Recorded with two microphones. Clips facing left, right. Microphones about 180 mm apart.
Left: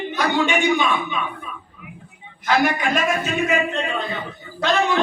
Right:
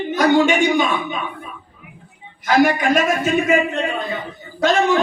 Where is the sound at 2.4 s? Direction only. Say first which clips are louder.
Right 4 dB; 45° right (ahead or behind).